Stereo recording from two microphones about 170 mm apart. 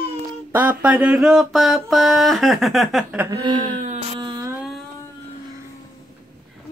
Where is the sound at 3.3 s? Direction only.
25° right (ahead or behind).